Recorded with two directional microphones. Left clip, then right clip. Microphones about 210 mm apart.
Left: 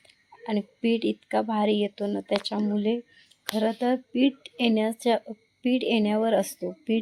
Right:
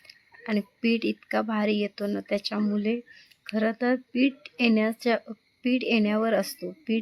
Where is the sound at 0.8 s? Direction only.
30° right (ahead or behind).